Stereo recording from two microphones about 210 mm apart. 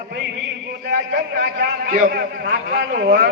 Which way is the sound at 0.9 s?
55° right (ahead or behind).